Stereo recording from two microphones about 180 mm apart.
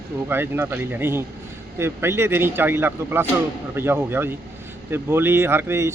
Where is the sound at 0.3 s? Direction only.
10° right (ahead or behind).